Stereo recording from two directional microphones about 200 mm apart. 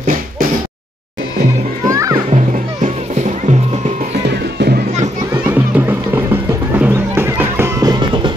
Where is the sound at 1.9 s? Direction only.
15° right (ahead or behind).